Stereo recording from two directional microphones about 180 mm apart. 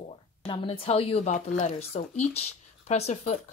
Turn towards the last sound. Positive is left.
turn(degrees=35)  # may be behind; listen again after turning